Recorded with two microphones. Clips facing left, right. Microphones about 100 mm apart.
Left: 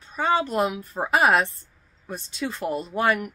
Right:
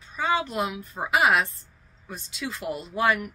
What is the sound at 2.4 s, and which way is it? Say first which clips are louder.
Speech: left 4 dB; 35° left (ahead or behind).